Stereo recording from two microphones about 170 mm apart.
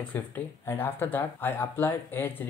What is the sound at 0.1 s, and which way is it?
Speech, 10° left (ahead or behind).